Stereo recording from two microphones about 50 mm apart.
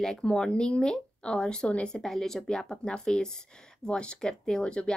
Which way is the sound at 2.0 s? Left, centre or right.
Centre.